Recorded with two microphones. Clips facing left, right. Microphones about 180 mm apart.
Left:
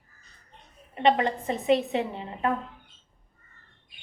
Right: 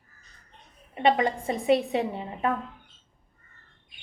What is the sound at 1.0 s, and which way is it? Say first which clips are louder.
A woman's voice: even; 10° right (ahead or behind).